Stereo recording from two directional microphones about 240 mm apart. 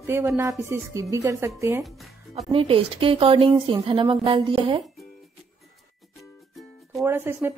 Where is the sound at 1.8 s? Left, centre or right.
Centre.